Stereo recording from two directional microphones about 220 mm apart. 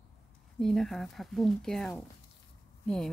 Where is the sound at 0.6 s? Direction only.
Centre (ahead or behind).